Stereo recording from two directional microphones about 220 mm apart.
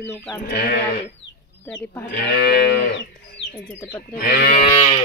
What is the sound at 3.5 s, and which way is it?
Speech, 10° left (ahead or behind).